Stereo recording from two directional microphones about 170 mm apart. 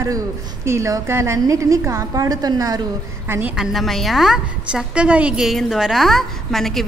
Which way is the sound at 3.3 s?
10° right (ahead or behind).